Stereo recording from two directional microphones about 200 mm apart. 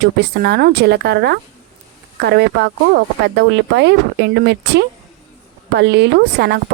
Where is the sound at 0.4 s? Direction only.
55° right (ahead or behind).